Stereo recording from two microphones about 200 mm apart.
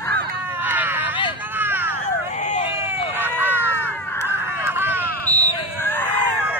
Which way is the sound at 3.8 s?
10° left (ahead or behind).